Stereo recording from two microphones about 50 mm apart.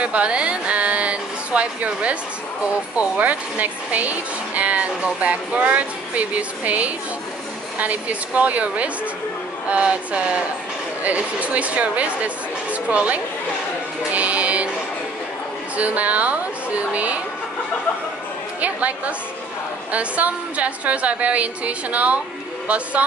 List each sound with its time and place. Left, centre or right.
0.0 s a sound: right
1.9 s speech: right
14.1 s music: right
15.7 s speech: right
18.6 s chatter: right
19.9 s speech: right